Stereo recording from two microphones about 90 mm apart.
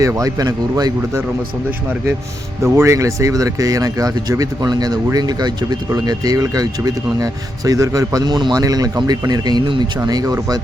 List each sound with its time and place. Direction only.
0.0 s speech: 40° right (ahead or behind)
2.6 s speech: 30° right (ahead or behind)